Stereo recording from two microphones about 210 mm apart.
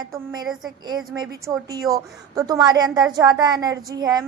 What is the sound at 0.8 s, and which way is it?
A woman's voice, 20° right (ahead or behind).